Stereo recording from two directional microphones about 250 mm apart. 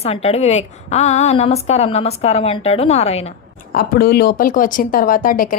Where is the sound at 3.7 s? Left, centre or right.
Left.